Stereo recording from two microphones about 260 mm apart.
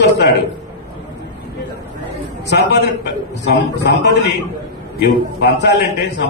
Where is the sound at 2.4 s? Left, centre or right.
Left.